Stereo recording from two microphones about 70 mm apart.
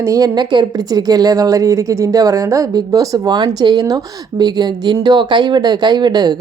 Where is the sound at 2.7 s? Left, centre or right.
Right.